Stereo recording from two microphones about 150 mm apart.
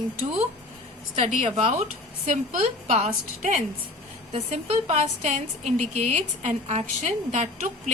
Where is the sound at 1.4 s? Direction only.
50° right (ahead or behind).